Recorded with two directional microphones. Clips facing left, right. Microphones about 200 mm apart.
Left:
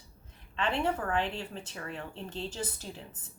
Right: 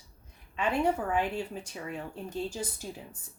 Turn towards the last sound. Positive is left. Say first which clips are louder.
# right 1 dB
turn(degrees=-10)  # may be behind; listen again after turning